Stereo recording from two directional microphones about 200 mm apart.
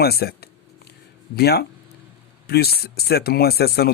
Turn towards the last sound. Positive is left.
turn(degrees=50)  # may be behind; listen again after turning